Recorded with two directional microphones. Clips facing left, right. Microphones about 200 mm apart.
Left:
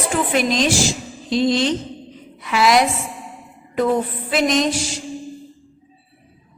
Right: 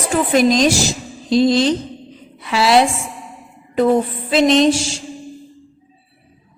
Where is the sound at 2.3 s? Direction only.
30° right (ahead or behind).